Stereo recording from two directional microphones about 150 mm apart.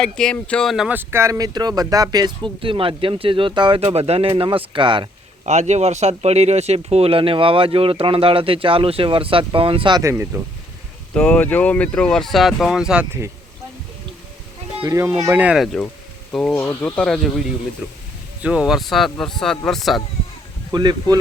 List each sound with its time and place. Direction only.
0.0 s speech: 5° left (ahead or behind)
0.9 s speech: 15° right (ahead or behind); by 5.0 s 35° right (ahead or behind)
5.5 s speech: 50° right (ahead or behind); by 10.0 s 35° right (ahead or behind)
10.0 s speech: 15° right (ahead or behind)
11.1 s speech: 10° left (ahead or behind); by 13.3 s 10° right (ahead or behind)
14.8 s speech: 20° right (ahead or behind)
15.5 s speech: centre (ahead or behind)
18.4 s speech: 5° right (ahead or behind)
20.7 s speech: 30° right (ahead or behind)